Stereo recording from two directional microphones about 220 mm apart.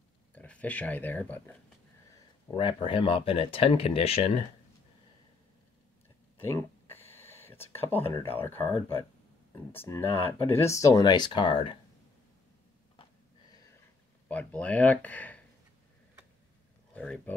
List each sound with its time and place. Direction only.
0.3 s speech: 5° left (ahead or behind)
2.5 s speech: 25° left (ahead or behind)
6.4 s a sound: 10° left (ahead or behind)
8.0 s speech: 15° left (ahead or behind)
14.3 s speech: 5° left (ahead or behind)
16.9 s speech: 5° left (ahead or behind)